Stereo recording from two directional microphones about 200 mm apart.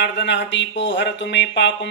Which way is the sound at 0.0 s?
60° left (ahead or behind).